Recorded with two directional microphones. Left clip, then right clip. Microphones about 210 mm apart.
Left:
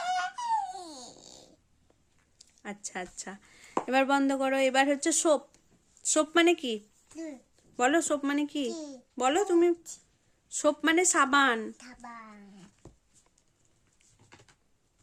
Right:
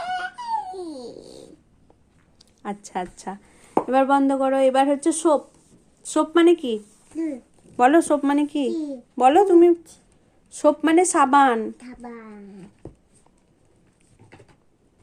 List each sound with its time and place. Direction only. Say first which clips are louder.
0.1 s a sound: right 2 dB; 25° left (ahead or behind)
2.4 s a woman's voice: right 9 dB; 5° left (ahead or behind)
3.8 s a woman's voice: right 7 dB; 30° left (ahead or behind)
7.8 s a woman's voice: right 10 dB; 10° left (ahead or behind)